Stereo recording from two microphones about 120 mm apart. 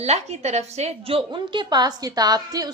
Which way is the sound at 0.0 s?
65° right (ahead or behind).